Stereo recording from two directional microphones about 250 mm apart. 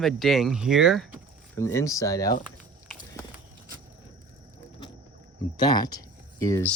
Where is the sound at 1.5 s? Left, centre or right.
Centre.